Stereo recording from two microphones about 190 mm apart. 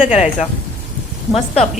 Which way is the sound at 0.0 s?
40° left (ahead or behind).